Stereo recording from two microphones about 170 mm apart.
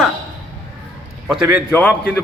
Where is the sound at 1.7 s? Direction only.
10° left (ahead or behind).